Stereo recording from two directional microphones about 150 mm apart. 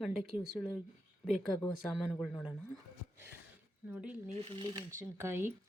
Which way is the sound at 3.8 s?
10° right (ahead or behind).